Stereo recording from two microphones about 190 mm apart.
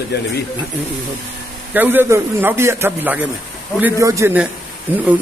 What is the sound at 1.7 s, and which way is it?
A man's voice, 10° right (ahead or behind).